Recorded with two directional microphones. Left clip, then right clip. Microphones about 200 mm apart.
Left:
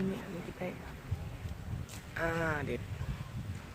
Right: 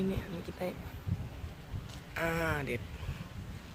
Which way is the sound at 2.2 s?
35° right (ahead or behind).